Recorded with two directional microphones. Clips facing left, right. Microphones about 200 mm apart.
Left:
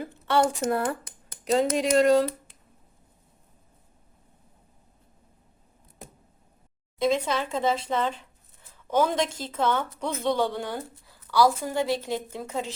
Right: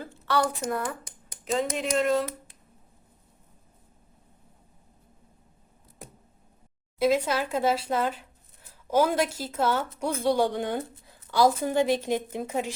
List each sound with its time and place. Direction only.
0.0 s a sound: 20° left (ahead or behind)
1.7 s speech: 35° left (ahead or behind)
7.0 s a woman's voice: 5° right (ahead or behind)